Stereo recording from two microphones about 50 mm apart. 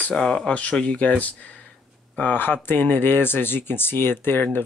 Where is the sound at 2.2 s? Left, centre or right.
Left.